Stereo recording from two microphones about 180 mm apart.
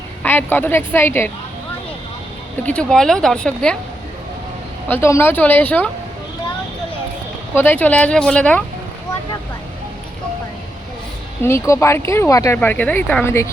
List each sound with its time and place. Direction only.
0.2 s a woman's voice: 10° left (ahead or behind)
2.6 s speech: 5° left (ahead or behind)
4.9 s a woman's voice: 15° left (ahead or behind)
7.5 s a woman's voice: 10° left (ahead or behind)
11.4 s a woman's voice: 15° left (ahead or behind)